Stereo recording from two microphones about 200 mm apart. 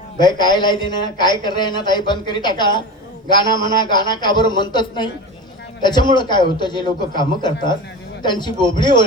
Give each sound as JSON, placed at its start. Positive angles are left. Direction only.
{"t": 0.2, "sound": "a man's voice", "side_deg": 20}